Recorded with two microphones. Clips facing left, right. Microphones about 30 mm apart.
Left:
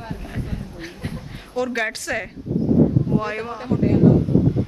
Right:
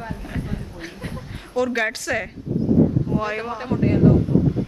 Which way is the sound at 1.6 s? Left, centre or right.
Centre.